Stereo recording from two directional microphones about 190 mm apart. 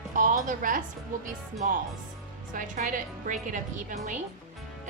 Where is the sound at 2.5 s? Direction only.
45° right (ahead or behind).